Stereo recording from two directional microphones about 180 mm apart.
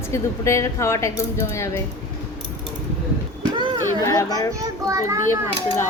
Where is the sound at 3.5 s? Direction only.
25° right (ahead or behind).